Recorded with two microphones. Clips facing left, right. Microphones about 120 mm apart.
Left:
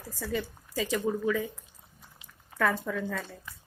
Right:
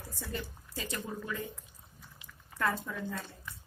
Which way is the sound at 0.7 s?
90° left.